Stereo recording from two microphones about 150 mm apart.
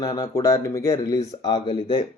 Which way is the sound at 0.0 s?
25° left (ahead or behind).